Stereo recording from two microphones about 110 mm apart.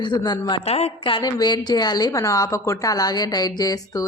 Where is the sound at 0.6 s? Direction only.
70° left (ahead or behind).